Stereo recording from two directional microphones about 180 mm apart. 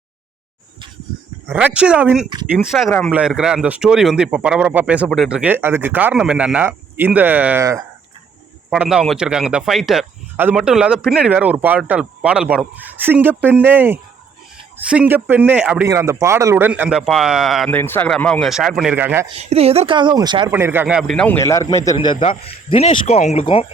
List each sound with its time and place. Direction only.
1.5 s speech: 5° right (ahead or behind)
8.7 s speech: 5° right (ahead or behind)
15.9 s speech: 15° right (ahead or behind); by 17.7 s centre (ahead or behind)
17.7 s speech: 10° left (ahead or behind); by 19.3 s 10° right (ahead or behind)
19.3 s speech: 35° right (ahead or behind)
20.5 s speech: 10° right (ahead or behind)
21.3 s a man's voice: 15° left (ahead or behind)